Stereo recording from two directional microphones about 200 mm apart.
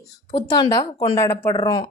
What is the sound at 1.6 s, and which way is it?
Speech, 25° left (ahead or behind).